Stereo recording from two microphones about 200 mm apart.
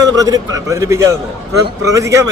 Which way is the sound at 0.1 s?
20° right (ahead or behind).